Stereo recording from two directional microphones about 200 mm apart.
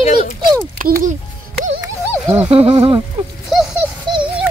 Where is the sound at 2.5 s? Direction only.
30° right (ahead or behind).